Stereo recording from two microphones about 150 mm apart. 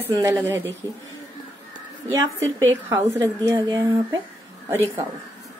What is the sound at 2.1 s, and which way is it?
A woman's voice, 20° right (ahead or behind).